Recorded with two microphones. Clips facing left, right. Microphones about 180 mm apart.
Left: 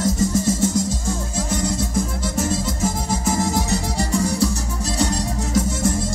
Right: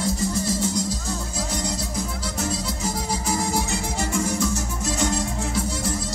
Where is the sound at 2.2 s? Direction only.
45° left (ahead or behind).